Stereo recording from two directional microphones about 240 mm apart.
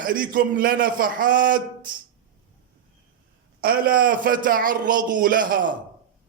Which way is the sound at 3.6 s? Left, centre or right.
Right.